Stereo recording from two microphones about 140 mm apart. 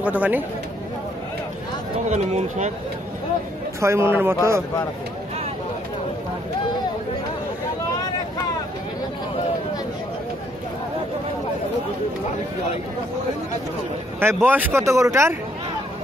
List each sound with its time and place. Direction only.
0.0 s speech: 10° right (ahead or behind)
2.0 s speech: 55° right (ahead or behind)
3.8 s speech: 20° right (ahead or behind)
14.2 s speech: 15° right (ahead or behind)